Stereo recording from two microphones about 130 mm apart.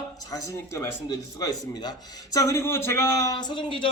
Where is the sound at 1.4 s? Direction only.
25° left (ahead or behind).